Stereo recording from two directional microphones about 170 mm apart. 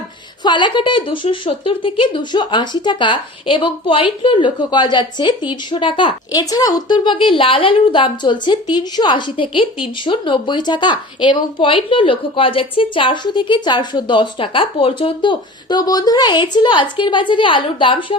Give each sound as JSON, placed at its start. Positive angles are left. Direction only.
{"t": 0.4, "sound": "a woman's voice", "side_deg": 25}